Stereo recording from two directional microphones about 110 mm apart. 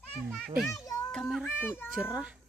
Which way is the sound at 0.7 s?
35° left (ahead or behind).